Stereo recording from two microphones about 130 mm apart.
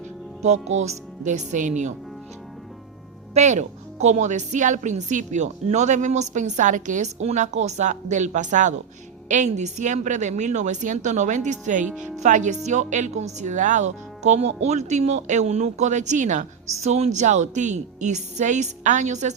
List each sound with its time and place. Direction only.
0.4 s a woman's voice: 60° right (ahead or behind)
3.3 s a woman's voice: 65° right (ahead or behind)